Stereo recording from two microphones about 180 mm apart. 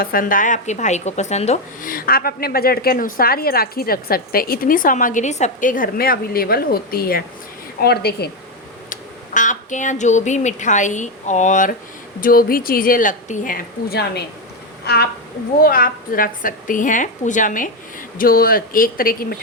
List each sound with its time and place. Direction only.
0.0 s speech: 50° left (ahead or behind)
1.9 s a woman's voice: 55° left (ahead or behind)
8.9 s a woman's voice: 45° left (ahead or behind)
15.6 s a woman's voice: 55° left (ahead or behind)